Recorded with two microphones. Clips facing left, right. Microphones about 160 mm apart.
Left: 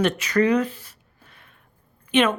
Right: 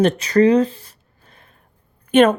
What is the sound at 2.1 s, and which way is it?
Speech, 45° right (ahead or behind).